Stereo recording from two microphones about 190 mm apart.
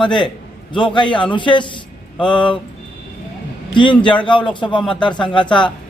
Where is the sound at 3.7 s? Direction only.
25° left (ahead or behind).